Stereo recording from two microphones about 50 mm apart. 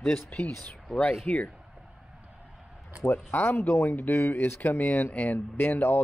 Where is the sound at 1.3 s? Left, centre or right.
Left.